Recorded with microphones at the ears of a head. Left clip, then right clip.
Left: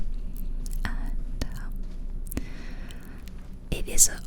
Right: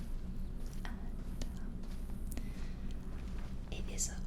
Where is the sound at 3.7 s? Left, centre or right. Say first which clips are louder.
Left 18 dB; left.